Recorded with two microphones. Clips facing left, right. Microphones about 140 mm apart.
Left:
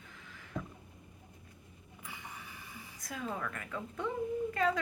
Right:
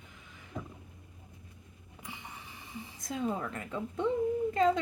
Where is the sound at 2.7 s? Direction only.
25° right (ahead or behind).